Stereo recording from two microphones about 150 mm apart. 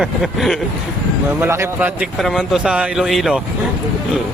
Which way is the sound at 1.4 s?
15° right (ahead or behind).